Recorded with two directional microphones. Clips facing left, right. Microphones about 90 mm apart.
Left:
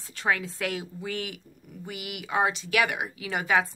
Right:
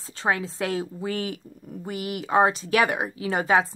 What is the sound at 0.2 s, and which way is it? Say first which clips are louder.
A woman's voice: right 2 dB; 30° right (ahead or behind).